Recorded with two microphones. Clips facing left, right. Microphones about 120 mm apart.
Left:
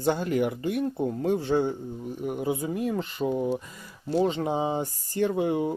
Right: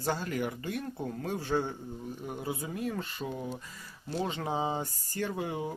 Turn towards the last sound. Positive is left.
turn(degrees=25)  # may be behind; listen again after turning